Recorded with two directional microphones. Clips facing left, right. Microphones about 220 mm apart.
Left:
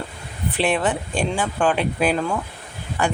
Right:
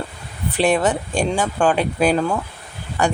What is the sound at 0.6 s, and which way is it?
Speech, 45° right (ahead or behind).